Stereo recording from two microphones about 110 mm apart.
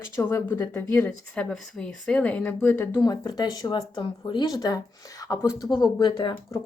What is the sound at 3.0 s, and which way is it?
Speech, 35° left (ahead or behind).